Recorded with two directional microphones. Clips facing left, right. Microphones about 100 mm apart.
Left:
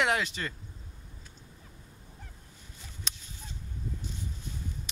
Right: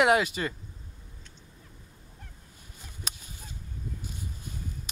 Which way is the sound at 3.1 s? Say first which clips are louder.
Right 1 dB; 10° right (ahead or behind).